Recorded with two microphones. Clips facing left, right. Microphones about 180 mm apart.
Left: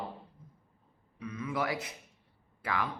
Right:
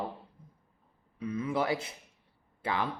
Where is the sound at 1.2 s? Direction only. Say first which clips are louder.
Right 4 dB; 30° right (ahead or behind).